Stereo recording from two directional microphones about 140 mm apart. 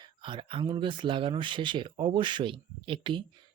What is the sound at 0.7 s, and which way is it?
Speech, 35° right (ahead or behind).